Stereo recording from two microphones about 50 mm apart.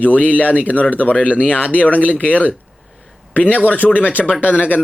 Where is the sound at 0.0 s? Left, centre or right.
Left.